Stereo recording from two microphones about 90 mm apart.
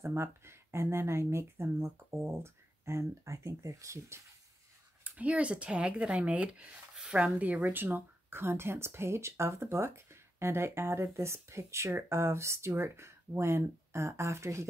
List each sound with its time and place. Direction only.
0.0 s speech: 30° right (ahead or behind)
5.0 s speech: 15° right (ahead or behind); by 14.7 s 35° right (ahead or behind)